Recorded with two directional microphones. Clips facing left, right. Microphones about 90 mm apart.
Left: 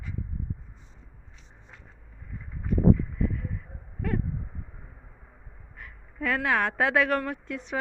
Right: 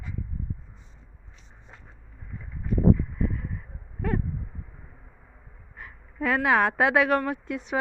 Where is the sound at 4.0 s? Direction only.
30° right (ahead or behind).